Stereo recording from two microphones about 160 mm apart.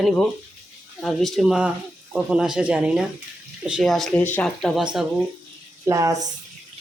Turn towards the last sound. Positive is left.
turn(degrees=-20)  # may be behind; listen again after turning